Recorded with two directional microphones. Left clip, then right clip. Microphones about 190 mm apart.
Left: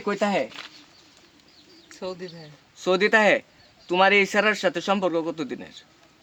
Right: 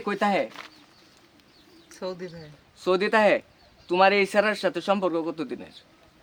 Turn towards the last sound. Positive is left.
turn(degrees=25)  # may be behind; listen again after turning